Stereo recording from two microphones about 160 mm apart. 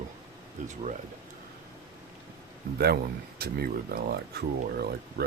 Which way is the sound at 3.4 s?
75° right (ahead or behind).